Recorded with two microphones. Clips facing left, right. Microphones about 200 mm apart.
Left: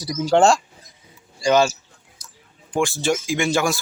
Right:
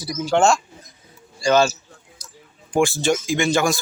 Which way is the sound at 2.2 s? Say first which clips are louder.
Right 3 dB; 55° left (ahead or behind).